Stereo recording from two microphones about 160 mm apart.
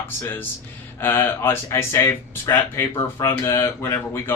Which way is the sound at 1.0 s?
15° left (ahead or behind).